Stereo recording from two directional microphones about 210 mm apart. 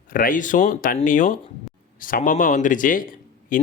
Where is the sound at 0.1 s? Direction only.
40° left (ahead or behind).